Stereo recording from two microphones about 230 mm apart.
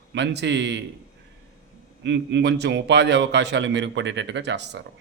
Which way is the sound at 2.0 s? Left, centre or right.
Right.